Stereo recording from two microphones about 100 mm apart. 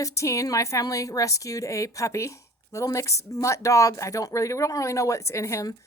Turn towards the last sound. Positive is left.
turn(degrees=30)  # may be behind; listen again after turning